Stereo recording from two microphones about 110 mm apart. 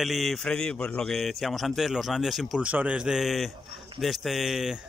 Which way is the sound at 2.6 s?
10° right (ahead or behind).